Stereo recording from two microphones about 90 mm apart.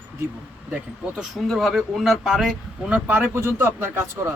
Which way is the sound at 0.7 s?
5° right (ahead or behind).